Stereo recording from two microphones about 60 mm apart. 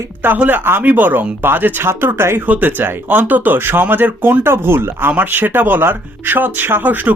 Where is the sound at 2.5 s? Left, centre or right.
Right.